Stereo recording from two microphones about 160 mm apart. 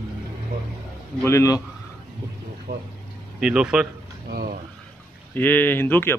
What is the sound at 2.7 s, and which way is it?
Speech, 60° right (ahead or behind).